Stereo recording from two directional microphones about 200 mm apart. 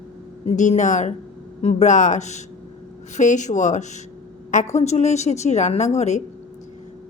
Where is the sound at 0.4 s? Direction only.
35° left (ahead or behind).